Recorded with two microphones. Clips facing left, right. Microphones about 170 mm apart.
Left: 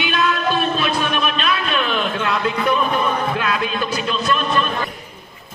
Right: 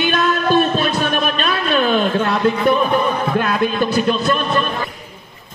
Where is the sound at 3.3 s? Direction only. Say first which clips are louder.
Right 4 dB; 45° right (ahead or behind).